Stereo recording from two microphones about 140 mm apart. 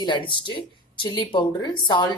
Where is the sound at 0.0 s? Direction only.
35° left (ahead or behind).